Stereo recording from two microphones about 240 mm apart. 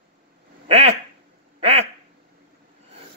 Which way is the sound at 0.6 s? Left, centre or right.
Right.